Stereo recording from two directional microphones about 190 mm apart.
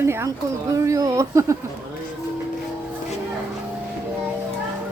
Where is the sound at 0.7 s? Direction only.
15° right (ahead or behind).